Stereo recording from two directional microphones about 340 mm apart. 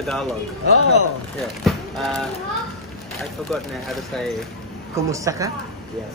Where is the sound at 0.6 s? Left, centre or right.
Left.